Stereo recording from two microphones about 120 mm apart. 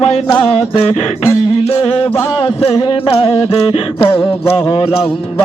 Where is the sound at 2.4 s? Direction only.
55° left (ahead or behind).